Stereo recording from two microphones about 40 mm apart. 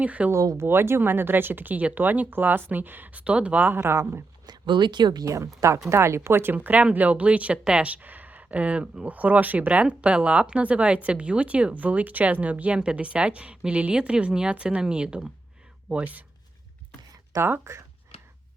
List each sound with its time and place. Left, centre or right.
0.0 s speech: right
0.3 s speech: right
3.8 s speech: right
5.7 s speech: right
6.5 s speech: right
8.0 s speech: right
12.7 s a woman's voice: right